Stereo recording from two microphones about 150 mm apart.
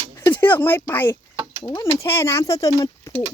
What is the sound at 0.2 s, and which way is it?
Speech, 10° left (ahead or behind).